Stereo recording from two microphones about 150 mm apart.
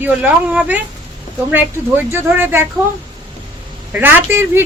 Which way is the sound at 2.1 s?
15° right (ahead or behind).